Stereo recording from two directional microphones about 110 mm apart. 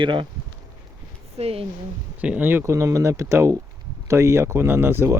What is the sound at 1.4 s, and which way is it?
Speech, 65° right (ahead or behind).